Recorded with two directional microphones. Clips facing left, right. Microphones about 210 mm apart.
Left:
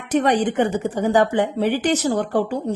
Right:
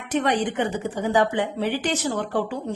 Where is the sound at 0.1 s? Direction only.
45° left (ahead or behind).